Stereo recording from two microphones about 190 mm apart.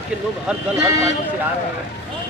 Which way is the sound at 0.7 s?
15° right (ahead or behind).